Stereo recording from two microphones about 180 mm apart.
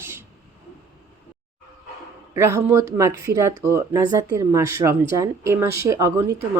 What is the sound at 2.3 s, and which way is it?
A woman's voice, 15° right (ahead or behind).